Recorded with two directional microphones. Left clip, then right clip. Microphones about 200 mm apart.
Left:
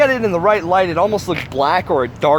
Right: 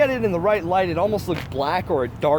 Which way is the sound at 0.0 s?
25° left (ahead or behind).